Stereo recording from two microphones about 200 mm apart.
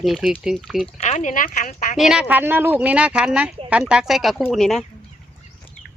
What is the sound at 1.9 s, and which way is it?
Speech, centre (ahead or behind).